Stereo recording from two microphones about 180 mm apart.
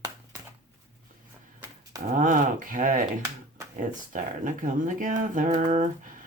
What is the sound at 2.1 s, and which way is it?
Speech, 45° right (ahead or behind).